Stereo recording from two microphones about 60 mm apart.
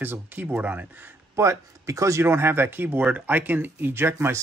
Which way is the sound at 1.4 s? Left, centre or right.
Right.